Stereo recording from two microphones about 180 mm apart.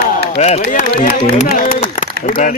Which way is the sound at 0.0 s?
45° left (ahead or behind).